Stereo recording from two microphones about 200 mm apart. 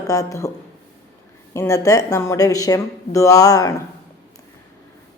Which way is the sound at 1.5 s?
15° left (ahead or behind).